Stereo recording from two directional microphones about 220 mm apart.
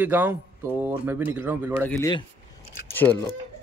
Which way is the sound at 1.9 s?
15° left (ahead or behind).